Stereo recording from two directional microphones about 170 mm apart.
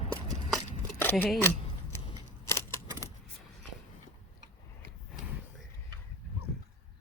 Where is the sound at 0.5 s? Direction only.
10° left (ahead or behind).